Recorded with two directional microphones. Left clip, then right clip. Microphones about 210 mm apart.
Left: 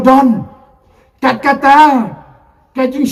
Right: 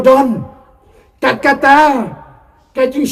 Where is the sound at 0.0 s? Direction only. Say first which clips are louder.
Even; 45° right (ahead or behind).